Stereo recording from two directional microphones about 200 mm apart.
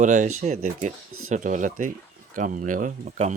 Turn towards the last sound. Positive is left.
turn(degrees=-40)  # may be behind; listen again after turning